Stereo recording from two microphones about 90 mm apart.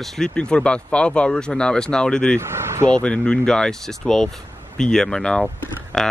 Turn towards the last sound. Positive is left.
turn(degrees=5)  # may be behind; listen again after turning